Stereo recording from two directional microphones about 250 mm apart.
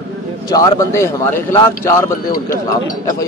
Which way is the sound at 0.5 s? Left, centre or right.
Centre.